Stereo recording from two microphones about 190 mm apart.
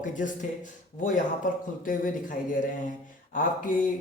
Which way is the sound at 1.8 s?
45° left (ahead or behind).